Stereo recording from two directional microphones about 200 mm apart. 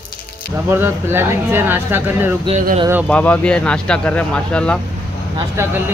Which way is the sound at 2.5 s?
40° right (ahead or behind).